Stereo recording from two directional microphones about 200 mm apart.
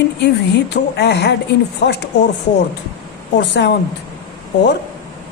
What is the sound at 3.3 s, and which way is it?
Speech, 60° left (ahead or behind).